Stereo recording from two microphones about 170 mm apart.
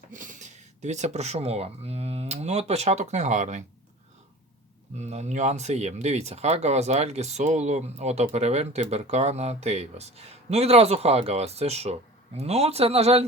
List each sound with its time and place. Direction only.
0.1 s speech: 50° right (ahead or behind)
4.9 s speech: 40° right (ahead or behind)